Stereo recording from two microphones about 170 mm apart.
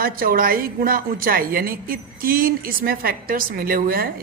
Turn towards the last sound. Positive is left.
turn(degrees=-60)  # may be behind; listen again after turning